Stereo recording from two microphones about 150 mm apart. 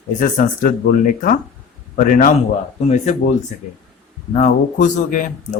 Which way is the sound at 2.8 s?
50° left (ahead or behind).